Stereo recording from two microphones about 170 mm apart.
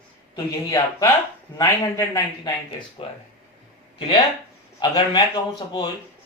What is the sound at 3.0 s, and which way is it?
Speech, 30° left (ahead or behind).